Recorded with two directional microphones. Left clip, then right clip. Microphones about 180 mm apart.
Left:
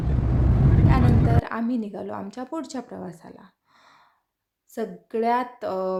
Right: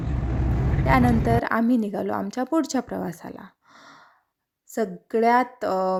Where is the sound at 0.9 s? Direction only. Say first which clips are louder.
Right 7 dB; 40° right (ahead or behind).